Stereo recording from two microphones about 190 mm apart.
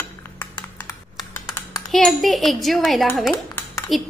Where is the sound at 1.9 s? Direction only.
Centre (ahead or behind).